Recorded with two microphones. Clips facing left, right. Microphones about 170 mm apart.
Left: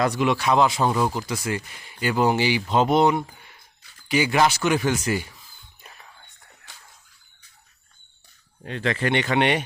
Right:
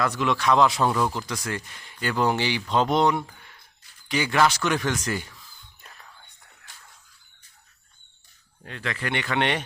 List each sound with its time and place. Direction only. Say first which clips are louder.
0.1 s speech: left 1 dB; 10° left (ahead or behind)
8.6 s a man's voice: left 7 dB; 25° left (ahead or behind)